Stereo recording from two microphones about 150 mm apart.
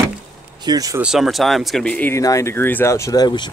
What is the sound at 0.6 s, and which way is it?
Speech, 25° right (ahead or behind).